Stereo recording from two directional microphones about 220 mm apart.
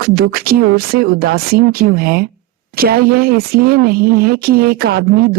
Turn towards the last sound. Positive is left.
turn(degrees=-45)  # may be behind; listen again after turning